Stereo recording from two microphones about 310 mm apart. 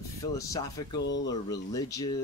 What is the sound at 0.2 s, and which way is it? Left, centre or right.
Speech, centre.